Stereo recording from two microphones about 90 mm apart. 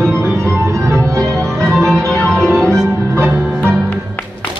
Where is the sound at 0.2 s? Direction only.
30° right (ahead or behind).